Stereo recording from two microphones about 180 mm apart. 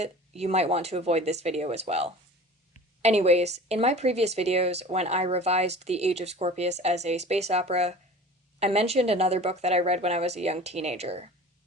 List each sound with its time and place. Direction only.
0.0 s speech: 35° right (ahead or behind)